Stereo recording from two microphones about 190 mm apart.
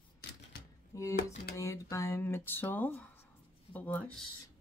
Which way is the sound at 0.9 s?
15° left (ahead or behind).